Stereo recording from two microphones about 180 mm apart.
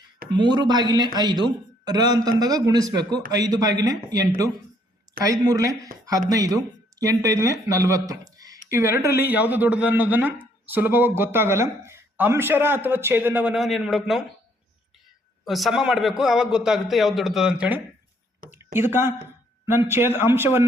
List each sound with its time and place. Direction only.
0.3 s speech: 25° right (ahead or behind)
5.2 s speech: 20° right (ahead or behind); by 14.3 s centre (ahead or behind)
15.4 s a man's voice: centre (ahead or behind)
18.5 s a sound: 10° right (ahead or behind)
19.6 s speech: 15° right (ahead or behind)